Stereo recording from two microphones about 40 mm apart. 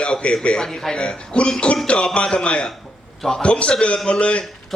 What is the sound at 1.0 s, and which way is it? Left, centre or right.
Speech, left.